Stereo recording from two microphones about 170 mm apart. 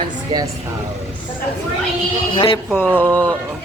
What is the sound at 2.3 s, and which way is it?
Speech, 30° left (ahead or behind).